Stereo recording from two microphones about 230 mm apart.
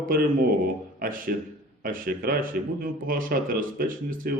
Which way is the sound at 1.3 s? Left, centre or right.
Right.